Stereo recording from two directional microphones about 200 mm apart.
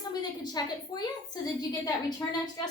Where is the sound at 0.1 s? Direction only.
20° left (ahead or behind).